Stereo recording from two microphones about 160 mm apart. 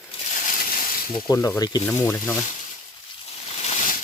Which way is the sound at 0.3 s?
55° left (ahead or behind).